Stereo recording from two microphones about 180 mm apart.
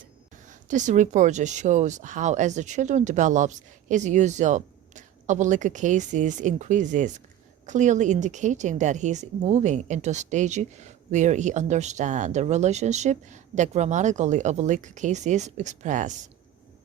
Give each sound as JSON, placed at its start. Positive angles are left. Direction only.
{"t": 0.7, "sound": "a woman's voice", "side_deg": -45}